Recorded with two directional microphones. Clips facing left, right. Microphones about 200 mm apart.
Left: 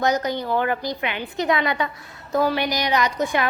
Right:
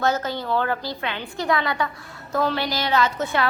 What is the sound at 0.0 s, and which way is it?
A woman's voice, 15° left (ahead or behind).